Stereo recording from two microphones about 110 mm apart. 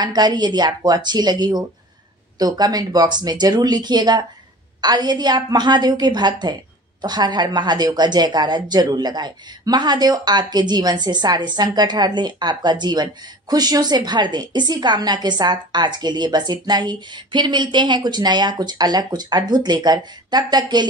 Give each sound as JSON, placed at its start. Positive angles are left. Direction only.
{"t": 0.0, "sound": "a woman's voice", "side_deg": -40}